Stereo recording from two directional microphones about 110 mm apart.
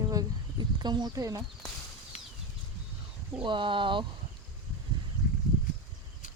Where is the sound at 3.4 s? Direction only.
50° right (ahead or behind).